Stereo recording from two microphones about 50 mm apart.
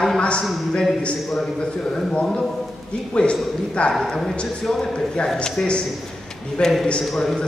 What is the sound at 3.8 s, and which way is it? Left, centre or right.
Speech, left.